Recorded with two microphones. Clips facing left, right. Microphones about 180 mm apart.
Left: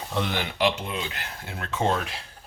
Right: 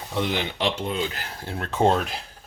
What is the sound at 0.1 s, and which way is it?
Speech, 15° right (ahead or behind).